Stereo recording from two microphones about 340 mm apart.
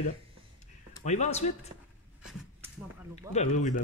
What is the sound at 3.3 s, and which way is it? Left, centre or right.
Speech, left.